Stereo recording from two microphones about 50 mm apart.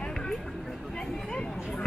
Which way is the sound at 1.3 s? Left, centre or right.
Left.